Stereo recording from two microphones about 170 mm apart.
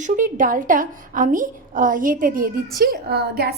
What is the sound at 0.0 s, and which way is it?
A woman's voice, 50° right (ahead or behind).